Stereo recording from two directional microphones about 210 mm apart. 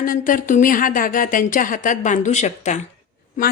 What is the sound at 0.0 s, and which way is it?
Speech, 40° left (ahead or behind).